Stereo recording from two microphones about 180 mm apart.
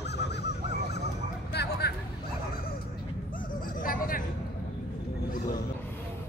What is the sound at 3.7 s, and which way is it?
Hubbub, 50° left (ahead or behind).